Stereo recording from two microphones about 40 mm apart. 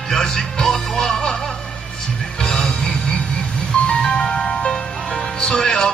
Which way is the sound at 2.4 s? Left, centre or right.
Centre.